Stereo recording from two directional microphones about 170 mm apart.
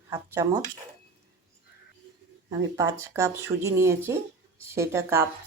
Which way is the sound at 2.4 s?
20° right (ahead or behind).